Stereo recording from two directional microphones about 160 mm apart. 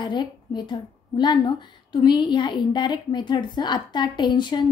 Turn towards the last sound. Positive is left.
turn(degrees=30)  # may be behind; listen again after turning